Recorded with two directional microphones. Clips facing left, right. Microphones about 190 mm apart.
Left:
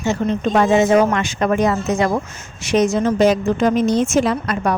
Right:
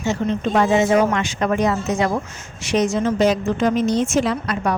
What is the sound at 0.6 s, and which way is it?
Speech, 50° left (ahead or behind).